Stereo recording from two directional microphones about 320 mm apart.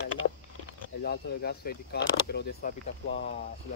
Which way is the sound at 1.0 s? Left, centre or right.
Left.